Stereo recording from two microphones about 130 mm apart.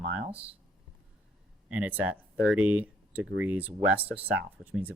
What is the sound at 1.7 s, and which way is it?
Speech, 10° right (ahead or behind).